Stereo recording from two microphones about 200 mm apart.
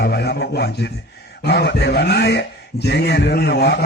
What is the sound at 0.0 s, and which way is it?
A man's voice, 55° left (ahead or behind).